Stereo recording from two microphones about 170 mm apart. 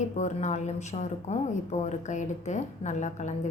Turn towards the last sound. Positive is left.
turn(degrees=45)  # may be behind; listen again after turning